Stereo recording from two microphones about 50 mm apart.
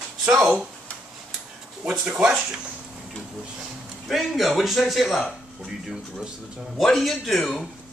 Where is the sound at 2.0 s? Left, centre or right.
Centre.